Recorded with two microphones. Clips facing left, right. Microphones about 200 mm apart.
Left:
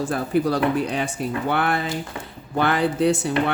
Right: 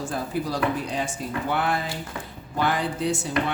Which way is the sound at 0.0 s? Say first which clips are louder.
Left 7 dB; 65° left (ahead or behind).